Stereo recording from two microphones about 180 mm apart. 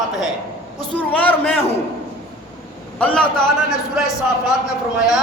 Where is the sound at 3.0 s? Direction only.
5° left (ahead or behind).